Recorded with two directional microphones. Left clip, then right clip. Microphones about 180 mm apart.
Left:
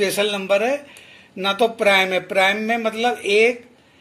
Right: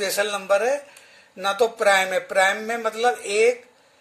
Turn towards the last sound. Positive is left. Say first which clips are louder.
# left 3 dB
turn(degrees=-50)  # may be behind; listen again after turning